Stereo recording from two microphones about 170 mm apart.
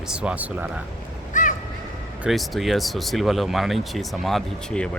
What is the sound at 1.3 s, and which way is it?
Crow, 50° left (ahead or behind).